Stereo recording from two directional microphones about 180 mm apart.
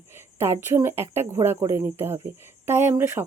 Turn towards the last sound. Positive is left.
turn(degrees=-15)  # may be behind; listen again after turning